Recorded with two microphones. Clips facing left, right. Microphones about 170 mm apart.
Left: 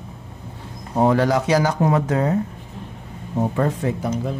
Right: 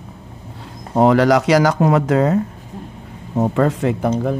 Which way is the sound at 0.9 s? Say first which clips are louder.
Right 5 dB; 90° right.